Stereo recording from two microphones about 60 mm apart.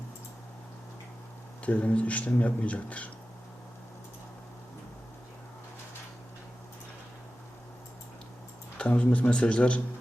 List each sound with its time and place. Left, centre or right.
1.6 s speech: left
8.8 s speech: centre